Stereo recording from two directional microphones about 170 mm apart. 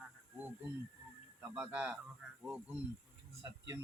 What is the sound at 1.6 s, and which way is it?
Speech, 10° right (ahead or behind).